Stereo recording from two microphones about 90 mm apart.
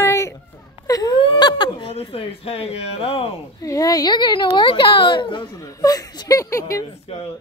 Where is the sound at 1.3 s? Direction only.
60° left (ahead or behind); by 2.0 s 85° left.